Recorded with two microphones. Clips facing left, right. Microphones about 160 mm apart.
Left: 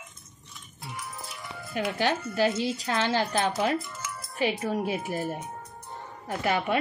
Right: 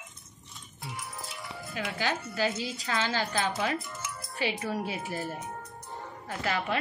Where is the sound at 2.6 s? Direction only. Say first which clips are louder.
Left 5 dB; centre (ahead or behind).